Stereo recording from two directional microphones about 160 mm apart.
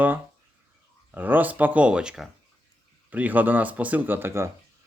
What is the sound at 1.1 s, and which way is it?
Speech, 10° right (ahead or behind).